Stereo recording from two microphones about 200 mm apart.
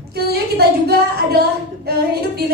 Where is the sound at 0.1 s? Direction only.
55° right (ahead or behind).